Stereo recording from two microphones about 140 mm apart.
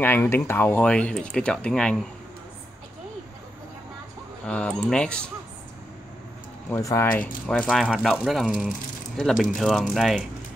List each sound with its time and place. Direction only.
0.0 s speech: 15° left (ahead or behind)
4.5 s speech: 10° left (ahead or behind)
6.7 s speech: 20° left (ahead or behind)
7.2 s speech: 10° left (ahead or behind)